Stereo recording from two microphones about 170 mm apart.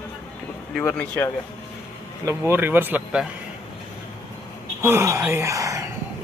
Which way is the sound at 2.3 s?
15° right (ahead or behind).